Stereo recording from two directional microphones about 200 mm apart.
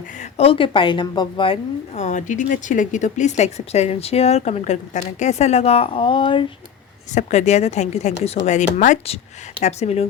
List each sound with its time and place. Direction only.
0.2 s a woman's voice: 30° left (ahead or behind)
7.1 s a woman's voice: 35° left (ahead or behind)